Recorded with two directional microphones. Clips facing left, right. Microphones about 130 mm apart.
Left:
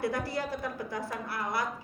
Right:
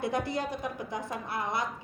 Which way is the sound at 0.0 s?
20° right (ahead or behind).